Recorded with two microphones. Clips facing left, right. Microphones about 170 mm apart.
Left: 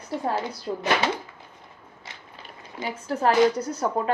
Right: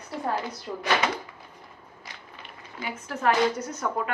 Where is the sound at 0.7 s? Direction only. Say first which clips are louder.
Left 7 dB; 30° left (ahead or behind).